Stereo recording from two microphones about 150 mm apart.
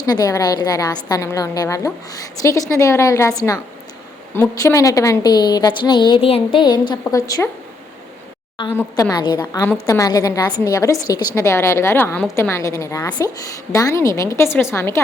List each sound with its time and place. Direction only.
0.0 s a woman's voice: 25° left (ahead or behind)
8.7 s a woman's voice: 15° left (ahead or behind)
9.0 s a woman's voice: 25° left (ahead or behind)